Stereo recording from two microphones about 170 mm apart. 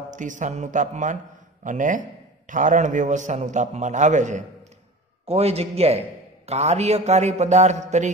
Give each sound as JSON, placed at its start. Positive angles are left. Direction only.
{"t": 0.1, "sound": "a man's voice", "side_deg": -50}